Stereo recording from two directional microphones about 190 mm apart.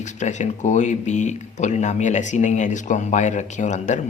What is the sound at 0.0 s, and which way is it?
Speech, 40° left (ahead or behind).